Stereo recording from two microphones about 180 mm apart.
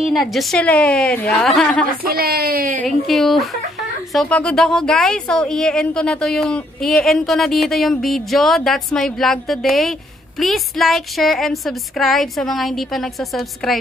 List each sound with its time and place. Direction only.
0.0 s speech: centre (ahead or behind)
2.0 s speech: 60° right (ahead or behind)
2.8 s speech: centre (ahead or behind)